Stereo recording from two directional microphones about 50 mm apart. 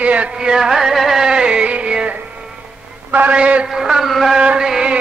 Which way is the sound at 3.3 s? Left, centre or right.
Right.